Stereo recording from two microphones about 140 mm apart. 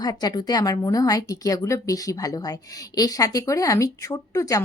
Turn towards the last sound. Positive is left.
turn(degrees=25)  # may be behind; listen again after turning